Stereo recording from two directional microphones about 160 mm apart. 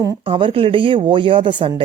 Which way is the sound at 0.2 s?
30° right (ahead or behind).